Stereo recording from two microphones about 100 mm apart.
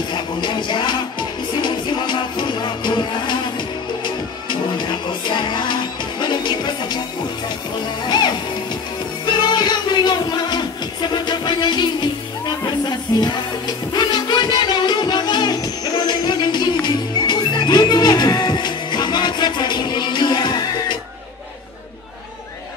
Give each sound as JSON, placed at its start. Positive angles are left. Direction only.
{"t": 0.1, "sound": "music", "side_deg": 50}
{"t": 8.0, "sound": "music", "side_deg": 45}